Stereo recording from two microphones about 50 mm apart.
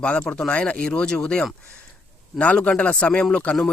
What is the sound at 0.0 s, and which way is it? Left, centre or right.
Speech, left.